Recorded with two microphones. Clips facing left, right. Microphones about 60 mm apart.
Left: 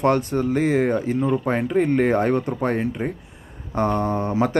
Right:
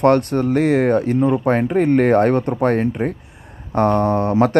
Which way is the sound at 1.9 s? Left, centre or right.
Right.